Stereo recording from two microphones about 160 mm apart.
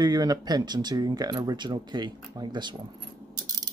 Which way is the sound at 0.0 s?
25° right (ahead or behind).